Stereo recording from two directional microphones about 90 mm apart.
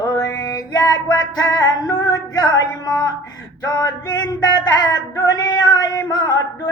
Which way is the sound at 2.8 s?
45° left (ahead or behind).